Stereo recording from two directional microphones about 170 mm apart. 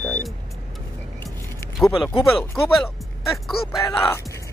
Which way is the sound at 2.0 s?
15° left (ahead or behind).